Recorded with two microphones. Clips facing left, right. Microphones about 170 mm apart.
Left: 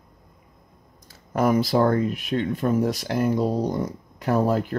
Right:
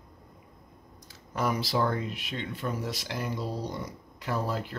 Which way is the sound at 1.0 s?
50° left (ahead or behind).